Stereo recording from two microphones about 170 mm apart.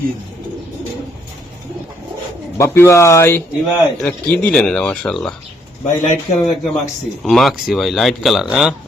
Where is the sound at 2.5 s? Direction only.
15° left (ahead or behind).